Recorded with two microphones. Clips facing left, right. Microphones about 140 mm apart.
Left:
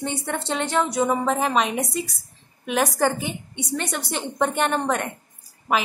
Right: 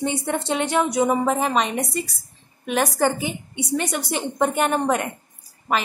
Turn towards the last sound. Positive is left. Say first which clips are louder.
# even
turn(degrees=0)  # may be behind; listen again after turning